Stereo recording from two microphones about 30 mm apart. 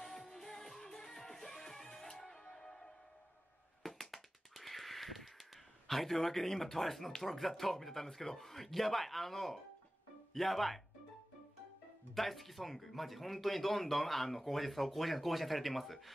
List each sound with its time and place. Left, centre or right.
0.0 s music: centre
3.8 s crow: centre
7.1 s speech: centre
12.1 s speech: centre